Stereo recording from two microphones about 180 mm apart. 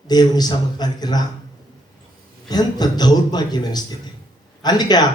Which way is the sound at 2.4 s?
20° left (ahead or behind).